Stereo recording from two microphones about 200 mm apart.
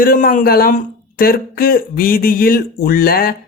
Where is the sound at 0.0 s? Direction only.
45° left (ahead or behind).